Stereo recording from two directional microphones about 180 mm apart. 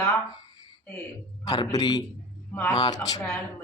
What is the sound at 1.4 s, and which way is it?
Speech, 20° left (ahead or behind).